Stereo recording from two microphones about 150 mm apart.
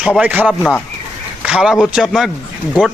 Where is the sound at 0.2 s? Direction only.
10° right (ahead or behind).